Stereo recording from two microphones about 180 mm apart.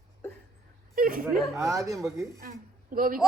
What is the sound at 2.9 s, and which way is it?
Speech, 50° right (ahead or behind).